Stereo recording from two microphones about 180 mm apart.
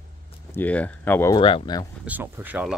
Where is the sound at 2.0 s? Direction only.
10° right (ahead or behind).